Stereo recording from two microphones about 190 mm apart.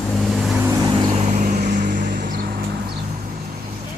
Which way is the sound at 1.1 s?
40° right (ahead or behind).